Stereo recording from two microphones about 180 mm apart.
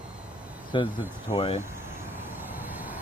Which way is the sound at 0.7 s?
25° left (ahead or behind).